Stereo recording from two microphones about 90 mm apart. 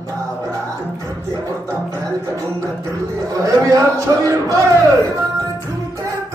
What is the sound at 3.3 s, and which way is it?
Speech, 40° right (ahead or behind).